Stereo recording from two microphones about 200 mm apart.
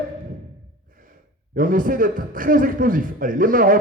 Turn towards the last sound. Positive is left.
turn(degrees=-45)  # may be behind; listen again after turning